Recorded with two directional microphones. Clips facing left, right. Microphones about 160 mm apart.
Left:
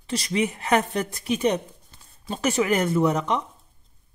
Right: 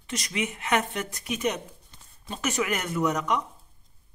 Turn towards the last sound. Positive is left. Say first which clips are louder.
# left 4 dB
turn(degrees=30)  # may be behind; listen again after turning